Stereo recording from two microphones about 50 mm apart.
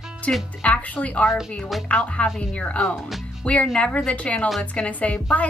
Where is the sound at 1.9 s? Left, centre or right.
Left.